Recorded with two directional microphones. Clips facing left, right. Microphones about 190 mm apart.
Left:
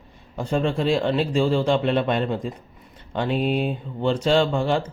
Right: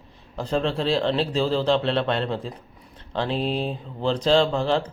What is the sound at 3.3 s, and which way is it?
Speech, 30° right (ahead or behind).